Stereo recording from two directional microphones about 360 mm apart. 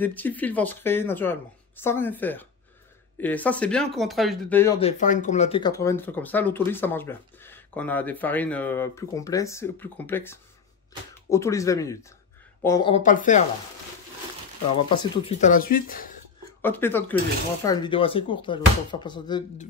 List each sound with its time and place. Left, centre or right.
0.0 s speech: centre; by 13.4 s left
14.8 s speech: centre
16.6 s speech: centre